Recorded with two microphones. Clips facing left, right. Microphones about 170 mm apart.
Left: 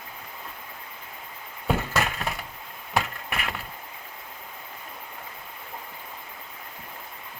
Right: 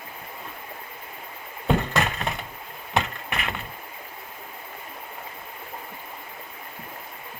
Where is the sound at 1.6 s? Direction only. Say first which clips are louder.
Right 3 dB; 5° left (ahead or behind).